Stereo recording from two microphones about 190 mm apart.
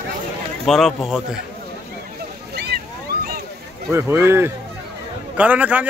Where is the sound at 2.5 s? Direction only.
60° right (ahead or behind).